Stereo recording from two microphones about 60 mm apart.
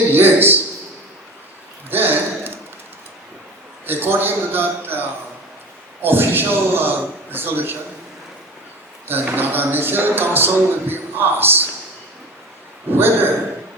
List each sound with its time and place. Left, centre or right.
0.1 s speech: right
1.9 s a sound: right
3.8 s speech: right
9.0 s speech: right
12.9 s speech: right